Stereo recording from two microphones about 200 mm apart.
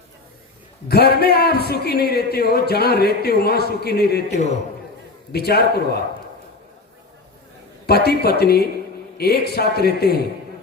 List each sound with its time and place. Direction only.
0.9 s a man's voice: 50° left (ahead or behind)
7.9 s a man's voice: 50° left (ahead or behind)